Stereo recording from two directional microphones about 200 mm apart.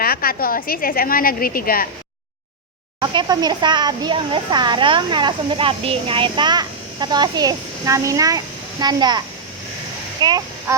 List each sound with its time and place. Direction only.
0.0 s a woman's voice: 50° left (ahead or behind)
3.0 s a child's voice: 20° right (ahead or behind)